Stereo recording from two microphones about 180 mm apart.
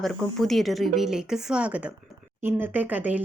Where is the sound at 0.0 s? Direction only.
Centre (ahead or behind).